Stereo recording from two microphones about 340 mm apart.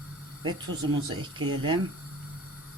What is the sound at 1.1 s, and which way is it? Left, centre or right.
Speech, centre.